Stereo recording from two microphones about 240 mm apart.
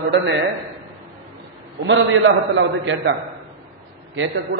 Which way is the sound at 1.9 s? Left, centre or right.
Right.